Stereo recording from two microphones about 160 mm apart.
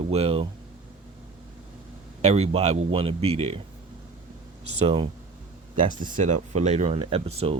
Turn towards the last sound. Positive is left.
turn(degrees=-40)  # may be behind; listen again after turning